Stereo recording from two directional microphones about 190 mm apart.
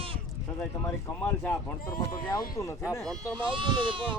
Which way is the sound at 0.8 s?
10° left (ahead or behind).